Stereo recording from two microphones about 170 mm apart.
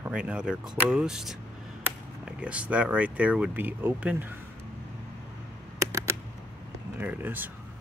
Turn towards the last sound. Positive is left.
turn(degrees=-10)  # may be behind; listen again after turning